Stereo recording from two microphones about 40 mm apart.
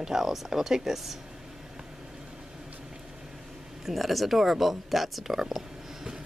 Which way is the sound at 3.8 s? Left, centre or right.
Centre.